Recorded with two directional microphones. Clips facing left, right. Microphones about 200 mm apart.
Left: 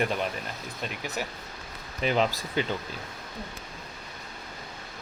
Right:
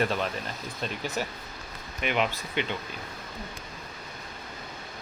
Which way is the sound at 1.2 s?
10° left (ahead or behind).